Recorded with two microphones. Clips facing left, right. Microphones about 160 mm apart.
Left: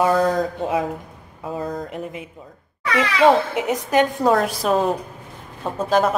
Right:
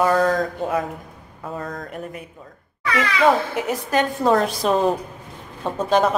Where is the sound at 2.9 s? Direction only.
25° left (ahead or behind).